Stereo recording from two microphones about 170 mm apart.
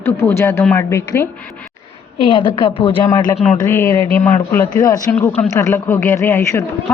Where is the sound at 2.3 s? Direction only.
30° left (ahead or behind).